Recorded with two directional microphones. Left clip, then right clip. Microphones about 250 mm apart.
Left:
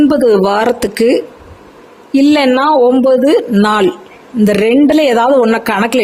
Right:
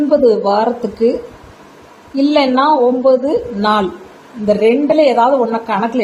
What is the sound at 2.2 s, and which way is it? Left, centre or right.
A woman's voice, left.